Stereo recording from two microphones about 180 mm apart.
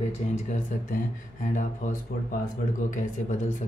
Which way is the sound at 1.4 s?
45° left (ahead or behind).